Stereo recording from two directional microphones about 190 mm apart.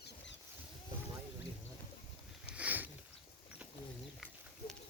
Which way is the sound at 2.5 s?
10° right (ahead or behind).